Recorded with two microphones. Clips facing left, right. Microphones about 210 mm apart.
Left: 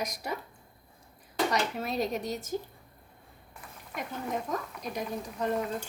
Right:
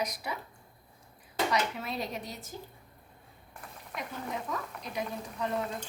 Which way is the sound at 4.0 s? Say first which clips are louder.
Left 3 dB; 45° left (ahead or behind).